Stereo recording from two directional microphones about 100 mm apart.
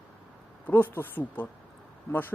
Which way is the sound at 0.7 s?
20° left (ahead or behind).